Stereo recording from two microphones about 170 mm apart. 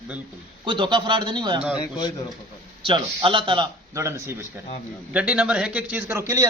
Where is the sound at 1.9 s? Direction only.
25° left (ahead or behind).